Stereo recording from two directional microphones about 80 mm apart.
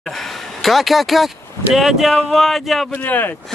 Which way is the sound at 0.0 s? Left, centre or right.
Centre.